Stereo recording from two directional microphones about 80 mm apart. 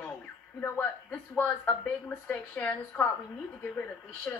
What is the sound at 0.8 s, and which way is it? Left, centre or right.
A woman's voice, left.